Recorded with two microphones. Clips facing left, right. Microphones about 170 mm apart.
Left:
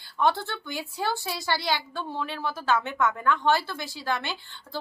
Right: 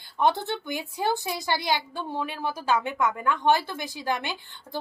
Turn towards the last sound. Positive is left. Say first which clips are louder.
# right 1 dB
turn(degrees=-15)  # may be behind; listen again after turning